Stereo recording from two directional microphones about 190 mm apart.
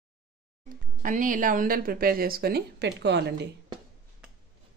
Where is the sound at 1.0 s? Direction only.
45° right (ahead or behind); by 3.5 s 65° right (ahead or behind).